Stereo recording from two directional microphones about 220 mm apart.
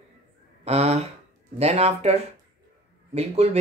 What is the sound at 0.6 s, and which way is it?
Speech, 30° right (ahead or behind).